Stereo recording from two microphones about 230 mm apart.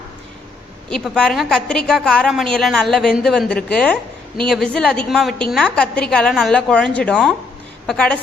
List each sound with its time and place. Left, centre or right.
0.9 s a woman's voice: centre